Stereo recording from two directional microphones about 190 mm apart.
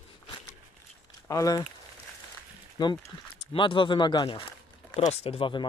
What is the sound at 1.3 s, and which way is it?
Speech, 20° left (ahead or behind).